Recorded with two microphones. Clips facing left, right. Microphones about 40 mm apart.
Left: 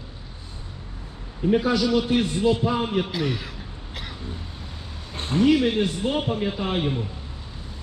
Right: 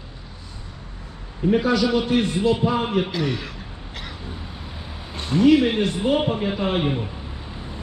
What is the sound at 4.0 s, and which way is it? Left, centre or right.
Vehicle, centre.